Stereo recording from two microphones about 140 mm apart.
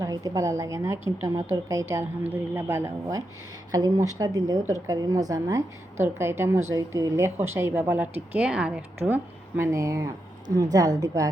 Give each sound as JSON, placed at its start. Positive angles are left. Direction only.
{"t": 0.0, "sound": "a woman's voice", "side_deg": -25}